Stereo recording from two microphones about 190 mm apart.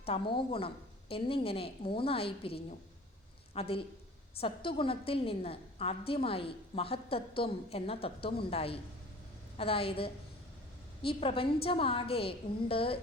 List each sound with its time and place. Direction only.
0.0 s a woman's voice: 30° left (ahead or behind)